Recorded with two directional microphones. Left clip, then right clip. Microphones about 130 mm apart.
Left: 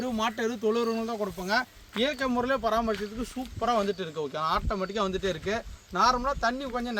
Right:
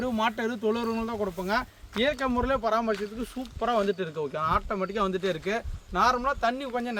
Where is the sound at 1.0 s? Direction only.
10° right (ahead or behind); by 3.0 s 30° right (ahead or behind).